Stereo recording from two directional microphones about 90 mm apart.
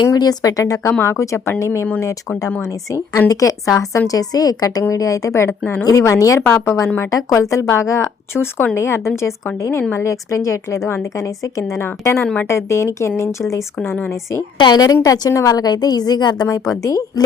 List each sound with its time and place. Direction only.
0.1 s a woman's voice: 45° left (ahead or behind); by 12.2 s 30° left (ahead or behind)
12.2 s speech: 15° left (ahead or behind)
12.5 s a woman's voice: 35° left (ahead or behind)
14.6 s a woman's voice: 50° left (ahead or behind)
16.8 s a woman's voice: 40° left (ahead or behind)